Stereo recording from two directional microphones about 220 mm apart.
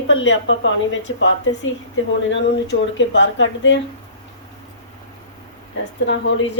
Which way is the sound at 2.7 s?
55° left (ahead or behind).